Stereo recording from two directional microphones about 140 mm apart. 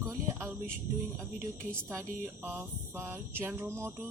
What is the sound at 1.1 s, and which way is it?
Speech, 15° right (ahead or behind).